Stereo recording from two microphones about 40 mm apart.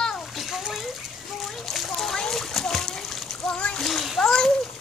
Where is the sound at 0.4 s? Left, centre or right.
Centre.